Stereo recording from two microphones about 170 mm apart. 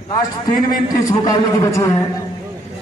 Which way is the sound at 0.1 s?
25° left (ahead or behind).